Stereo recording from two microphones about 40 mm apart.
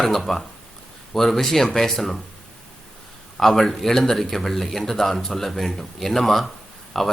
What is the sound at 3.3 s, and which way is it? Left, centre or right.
Speech, centre.